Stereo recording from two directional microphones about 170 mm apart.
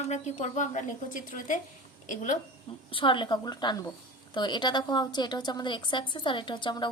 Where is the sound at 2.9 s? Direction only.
30° left (ahead or behind).